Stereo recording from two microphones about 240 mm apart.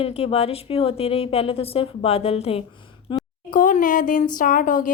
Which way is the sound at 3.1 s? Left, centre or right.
Centre.